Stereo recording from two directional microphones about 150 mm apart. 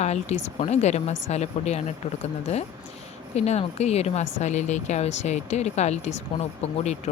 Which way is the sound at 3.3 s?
45° left (ahead or behind).